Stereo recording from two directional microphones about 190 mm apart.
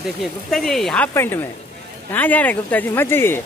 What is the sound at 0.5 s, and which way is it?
Speech, centre (ahead or behind).